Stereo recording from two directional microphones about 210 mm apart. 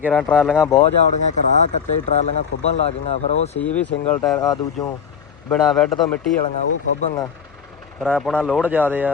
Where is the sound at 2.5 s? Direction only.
65° left (ahead or behind).